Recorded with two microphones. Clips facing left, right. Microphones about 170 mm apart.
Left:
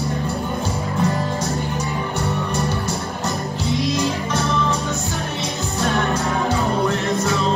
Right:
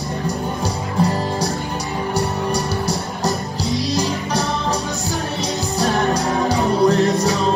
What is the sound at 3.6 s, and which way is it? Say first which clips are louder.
Music: even; 35° right (ahead or behind).